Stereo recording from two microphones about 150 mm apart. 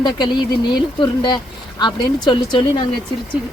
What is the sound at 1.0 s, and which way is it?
Speech, 30° left (ahead or behind).